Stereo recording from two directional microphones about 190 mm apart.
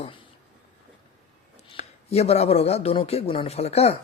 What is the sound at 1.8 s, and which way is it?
Speech, 35° left (ahead or behind).